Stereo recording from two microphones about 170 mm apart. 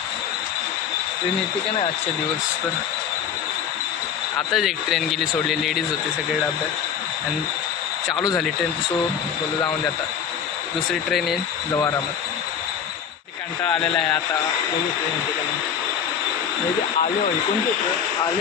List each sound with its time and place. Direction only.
4.4 s a man's voice: centre (ahead or behind)
8.1 s speech: 20° left (ahead or behind)
10.9 s a man's voice: centre (ahead or behind)
11.7 s speech: 20° left (ahead or behind)